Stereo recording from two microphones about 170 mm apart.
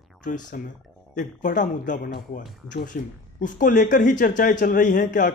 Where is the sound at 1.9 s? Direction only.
60° left (ahead or behind).